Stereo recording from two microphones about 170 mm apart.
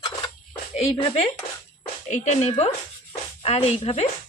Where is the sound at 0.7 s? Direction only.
35° left (ahead or behind).